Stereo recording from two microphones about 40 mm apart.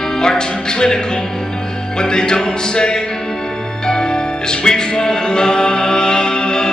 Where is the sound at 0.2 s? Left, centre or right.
Centre.